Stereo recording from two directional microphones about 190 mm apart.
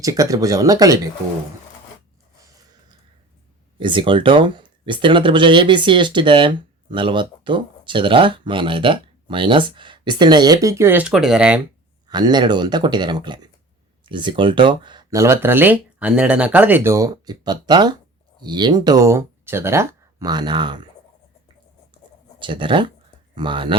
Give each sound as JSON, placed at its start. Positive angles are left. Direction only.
{"t": 0.0, "sound": "speech", "side_deg": -20}
{"t": 3.8, "sound": "speech", "side_deg": -25}
{"t": 12.0, "sound": "speech", "side_deg": -20}
{"t": 22.4, "sound": "speech", "side_deg": -25}